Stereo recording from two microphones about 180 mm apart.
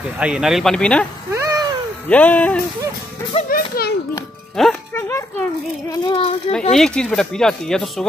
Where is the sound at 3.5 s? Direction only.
60° left (ahead or behind).